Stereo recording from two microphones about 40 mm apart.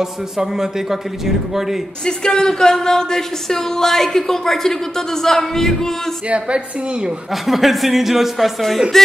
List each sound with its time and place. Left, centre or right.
0.0 s a man's voice: centre
2.0 s speech: centre
6.2 s a woman's voice: right
7.4 s speech: centre